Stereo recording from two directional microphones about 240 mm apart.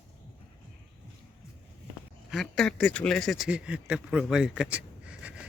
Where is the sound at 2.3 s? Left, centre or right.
Centre.